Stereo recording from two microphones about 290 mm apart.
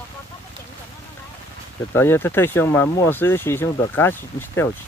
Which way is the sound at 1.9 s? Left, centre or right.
Centre.